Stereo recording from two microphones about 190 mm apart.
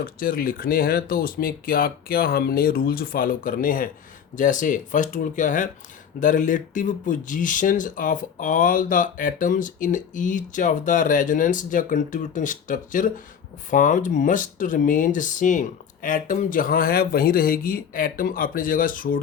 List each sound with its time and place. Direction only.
0.0 s speech: 50° left (ahead or behind)